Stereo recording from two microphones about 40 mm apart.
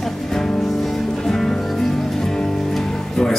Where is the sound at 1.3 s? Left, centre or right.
Centre.